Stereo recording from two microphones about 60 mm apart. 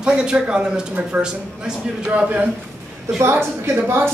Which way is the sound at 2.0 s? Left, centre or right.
Right.